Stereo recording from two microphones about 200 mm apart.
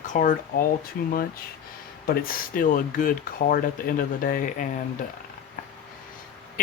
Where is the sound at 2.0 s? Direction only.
45° left (ahead or behind).